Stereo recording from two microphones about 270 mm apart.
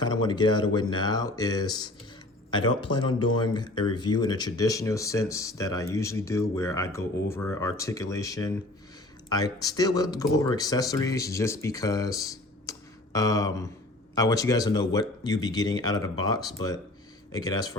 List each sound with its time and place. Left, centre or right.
0.0 s speech: centre
2.9 s speech: centre